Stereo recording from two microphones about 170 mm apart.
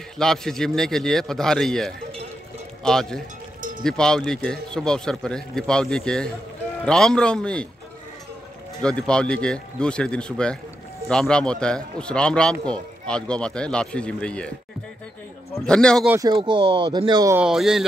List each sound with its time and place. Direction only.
0.2 s a man's voice: 5° left (ahead or behind)
8.8 s a man's voice: 5° left (ahead or behind)
15.6 s a man's voice: 5° left (ahead or behind)
16.1 s speech: 20° right (ahead or behind)
17.4 s a man's voice: 5° right (ahead or behind)